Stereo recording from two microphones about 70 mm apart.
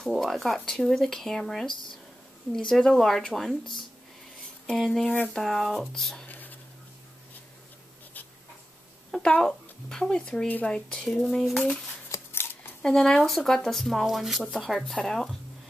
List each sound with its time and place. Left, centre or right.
0.1 s speech: centre
4.7 s speech: centre
6.2 s a sound: left
9.1 s a sound: centre
9.8 s speech: centre
12.3 s scissors: left
12.8 s speech: centre